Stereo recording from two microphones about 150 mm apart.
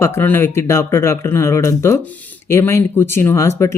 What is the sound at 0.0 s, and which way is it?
Speech, 15° left (ahead or behind).